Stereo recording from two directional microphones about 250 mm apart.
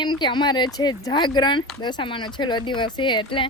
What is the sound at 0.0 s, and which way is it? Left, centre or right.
Speech, centre.